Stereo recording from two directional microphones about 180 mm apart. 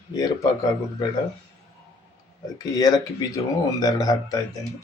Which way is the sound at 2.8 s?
20° left (ahead or behind).